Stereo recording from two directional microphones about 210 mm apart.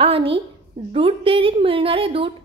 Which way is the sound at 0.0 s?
25° right (ahead or behind).